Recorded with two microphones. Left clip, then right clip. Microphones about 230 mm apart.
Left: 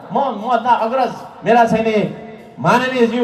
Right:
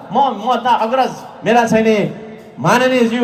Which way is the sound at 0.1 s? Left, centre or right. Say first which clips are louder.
Right 2 dB; right.